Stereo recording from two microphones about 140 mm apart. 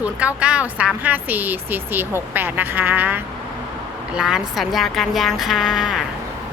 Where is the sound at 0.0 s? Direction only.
10° right (ahead or behind).